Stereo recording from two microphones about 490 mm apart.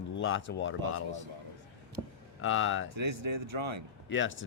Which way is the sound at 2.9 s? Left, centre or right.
Right.